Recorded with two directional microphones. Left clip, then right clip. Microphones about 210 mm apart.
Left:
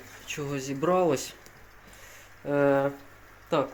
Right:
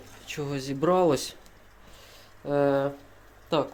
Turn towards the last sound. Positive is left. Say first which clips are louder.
# even
turn(degrees=-10)  # may be behind; listen again after turning